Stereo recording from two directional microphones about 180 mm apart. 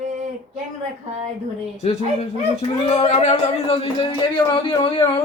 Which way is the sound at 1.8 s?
35° left (ahead or behind).